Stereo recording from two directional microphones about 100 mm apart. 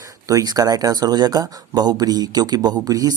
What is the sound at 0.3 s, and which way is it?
Speech, 40° right (ahead or behind).